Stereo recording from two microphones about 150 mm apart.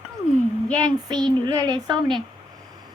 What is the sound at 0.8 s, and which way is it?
Speech, 30° right (ahead or behind).